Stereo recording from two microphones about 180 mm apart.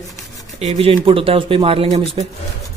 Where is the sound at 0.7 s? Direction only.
30° right (ahead or behind).